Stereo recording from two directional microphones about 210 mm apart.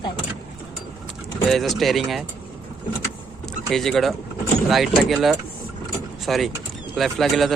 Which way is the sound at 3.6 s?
Centre (ahead or behind).